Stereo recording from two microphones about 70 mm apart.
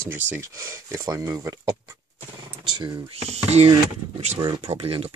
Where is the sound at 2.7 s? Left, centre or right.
Right.